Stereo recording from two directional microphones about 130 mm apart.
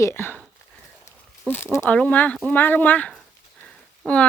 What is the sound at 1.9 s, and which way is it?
Speech, 10° left (ahead or behind).